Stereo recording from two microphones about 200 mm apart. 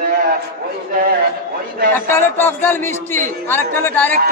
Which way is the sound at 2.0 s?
10° left (ahead or behind).